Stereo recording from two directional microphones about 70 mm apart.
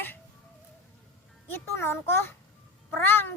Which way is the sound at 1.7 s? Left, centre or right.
Left.